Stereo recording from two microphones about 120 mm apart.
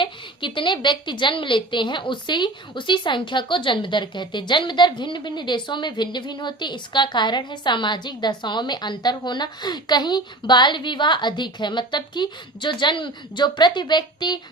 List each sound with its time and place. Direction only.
0.0 s a woman's voice: 40° left (ahead or behind)